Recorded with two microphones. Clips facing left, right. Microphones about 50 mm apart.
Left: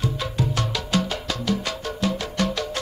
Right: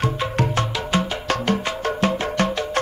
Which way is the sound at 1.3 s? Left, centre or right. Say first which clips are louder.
Right 6 dB; right.